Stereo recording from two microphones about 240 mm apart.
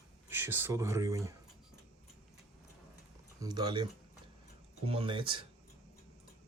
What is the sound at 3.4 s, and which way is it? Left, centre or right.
Speech, centre.